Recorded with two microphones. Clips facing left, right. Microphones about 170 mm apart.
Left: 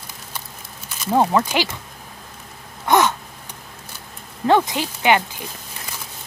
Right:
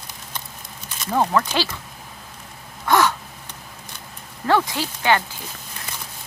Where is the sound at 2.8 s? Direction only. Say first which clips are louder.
Left 1 dB; 20° left (ahead or behind).